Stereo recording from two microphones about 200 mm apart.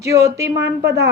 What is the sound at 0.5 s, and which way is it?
Speech, 60° right (ahead or behind).